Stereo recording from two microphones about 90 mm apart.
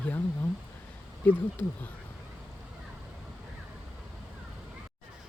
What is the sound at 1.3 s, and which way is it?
Speech, 20° left (ahead or behind).